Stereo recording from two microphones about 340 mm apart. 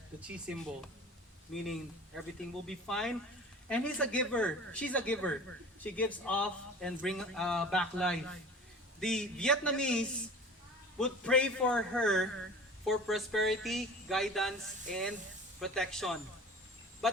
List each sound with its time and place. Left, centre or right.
1.6 s speech: centre